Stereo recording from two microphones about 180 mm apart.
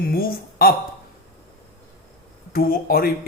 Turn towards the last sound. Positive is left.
turn(degrees=55)  # may be behind; listen again after turning